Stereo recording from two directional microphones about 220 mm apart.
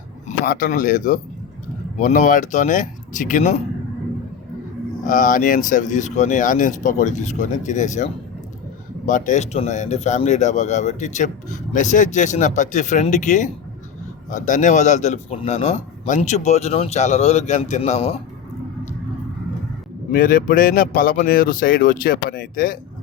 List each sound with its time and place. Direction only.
0.3 s speech: 40° left (ahead or behind)
5.0 s speech: 35° left (ahead or behind)
20.1 s speech: 40° left (ahead or behind)